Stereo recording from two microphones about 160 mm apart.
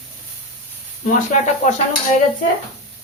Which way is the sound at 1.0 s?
50° left (ahead or behind).